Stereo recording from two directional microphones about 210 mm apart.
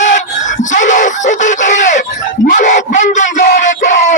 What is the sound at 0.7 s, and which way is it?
Screaming, 35° left (ahead or behind).